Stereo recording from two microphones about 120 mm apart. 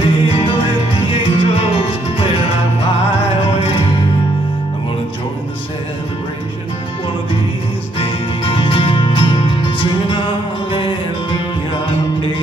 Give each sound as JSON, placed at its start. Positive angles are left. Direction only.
{"t": 0.0, "sound": "music", "side_deg": 50}
{"t": 3.5, "sound": "music", "side_deg": 50}
{"t": 8.0, "sound": "music", "side_deg": 50}